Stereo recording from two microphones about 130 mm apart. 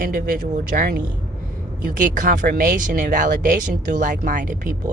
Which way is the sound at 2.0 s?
90° right.